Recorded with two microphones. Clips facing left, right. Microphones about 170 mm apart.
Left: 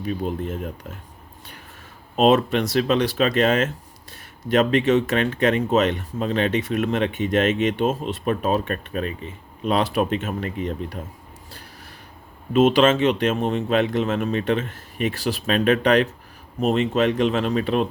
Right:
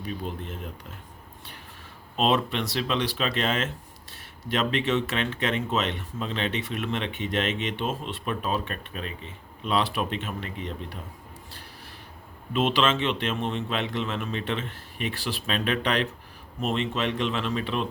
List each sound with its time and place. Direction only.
0.2 s speech: 45° left (ahead or behind)
2.1 s speech: 45° left (ahead or behind)
12.5 s speech: 45° left (ahead or behind)